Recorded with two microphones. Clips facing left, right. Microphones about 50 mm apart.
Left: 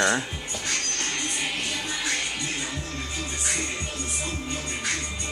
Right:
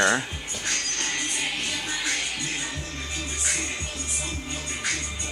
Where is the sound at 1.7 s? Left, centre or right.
Centre.